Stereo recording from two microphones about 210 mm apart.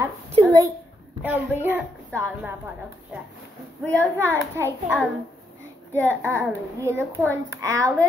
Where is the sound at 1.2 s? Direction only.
10° right (ahead or behind).